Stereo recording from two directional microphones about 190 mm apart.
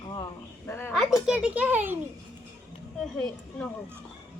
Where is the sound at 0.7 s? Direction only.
10° left (ahead or behind).